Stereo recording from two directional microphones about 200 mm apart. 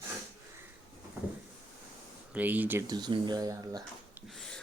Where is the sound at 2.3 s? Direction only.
10° right (ahead or behind).